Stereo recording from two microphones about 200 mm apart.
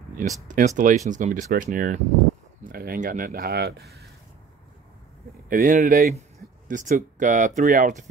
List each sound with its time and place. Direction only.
0.5 s speech: 40° right (ahead or behind)
5.5 s speech: 40° right (ahead or behind)